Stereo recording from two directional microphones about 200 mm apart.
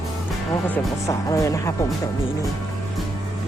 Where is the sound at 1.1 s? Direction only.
15° left (ahead or behind).